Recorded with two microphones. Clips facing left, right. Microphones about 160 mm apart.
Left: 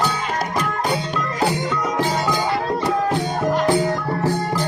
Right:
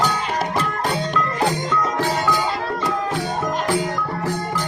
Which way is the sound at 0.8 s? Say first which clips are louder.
Even; 5° left (ahead or behind).